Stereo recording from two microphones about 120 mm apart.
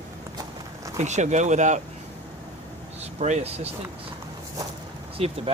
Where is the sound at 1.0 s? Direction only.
75° right (ahead or behind).